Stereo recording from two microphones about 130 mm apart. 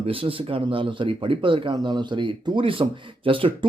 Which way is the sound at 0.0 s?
45° right (ahead or behind).